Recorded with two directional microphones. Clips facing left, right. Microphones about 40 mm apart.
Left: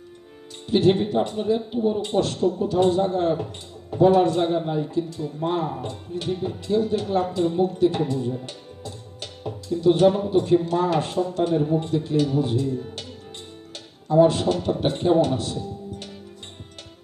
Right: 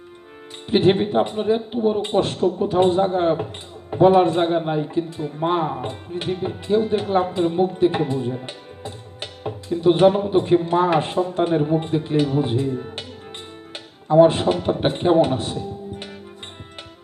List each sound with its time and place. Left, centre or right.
0.7 s speech: right